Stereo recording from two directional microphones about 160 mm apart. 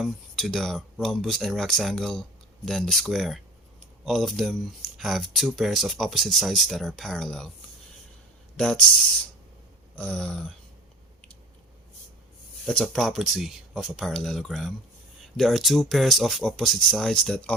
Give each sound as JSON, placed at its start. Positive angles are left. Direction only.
{"t": 0.0, "sound": "speech", "side_deg": 0}
{"t": 8.5, "sound": "speech", "side_deg": 5}
{"t": 9.9, "sound": "a sound", "side_deg": 5}
{"t": 12.6, "sound": "speech", "side_deg": 5}